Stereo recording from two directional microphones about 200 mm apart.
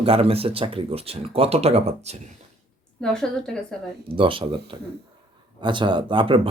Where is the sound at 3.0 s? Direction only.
5° left (ahead or behind).